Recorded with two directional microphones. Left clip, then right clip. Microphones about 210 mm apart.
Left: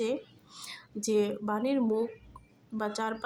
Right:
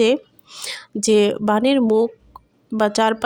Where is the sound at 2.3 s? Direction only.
35° right (ahead or behind).